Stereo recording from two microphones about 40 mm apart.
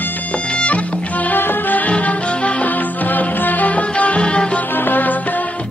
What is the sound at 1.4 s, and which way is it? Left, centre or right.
Music, left.